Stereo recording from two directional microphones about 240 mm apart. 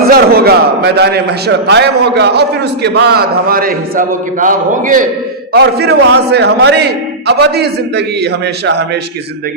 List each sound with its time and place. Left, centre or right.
0.1 s a man's voice: right